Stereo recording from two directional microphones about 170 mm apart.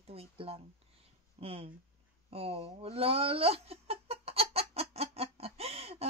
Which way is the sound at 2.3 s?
35° right (ahead or behind).